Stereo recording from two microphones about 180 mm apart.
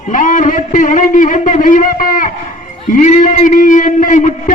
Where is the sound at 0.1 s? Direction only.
45° left (ahead or behind).